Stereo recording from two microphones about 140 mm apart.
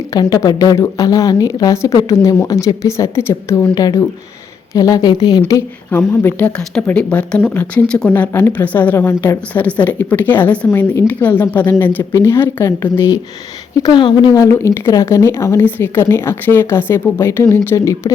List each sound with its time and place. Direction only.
0.1 s a woman's voice: 25° left (ahead or behind)
13.7 s speech: 30° left (ahead or behind)